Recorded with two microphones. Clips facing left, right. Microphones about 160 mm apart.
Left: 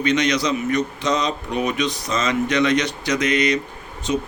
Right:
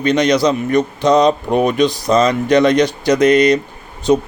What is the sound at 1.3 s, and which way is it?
Speech, 55° right (ahead or behind).